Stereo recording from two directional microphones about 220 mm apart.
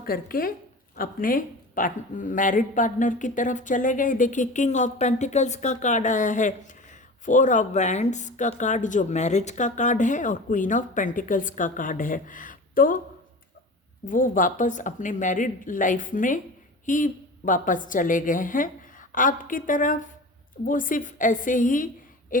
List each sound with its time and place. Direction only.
0.0 s speech: 40° left (ahead or behind)
14.0 s speech: 35° left (ahead or behind)
22.3 s a sound: 40° left (ahead or behind)